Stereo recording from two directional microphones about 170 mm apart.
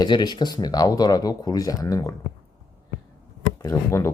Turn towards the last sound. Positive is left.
turn(degrees=15)  # may be behind; listen again after turning